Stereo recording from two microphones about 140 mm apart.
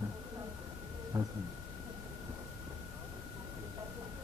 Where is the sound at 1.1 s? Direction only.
25° right (ahead or behind).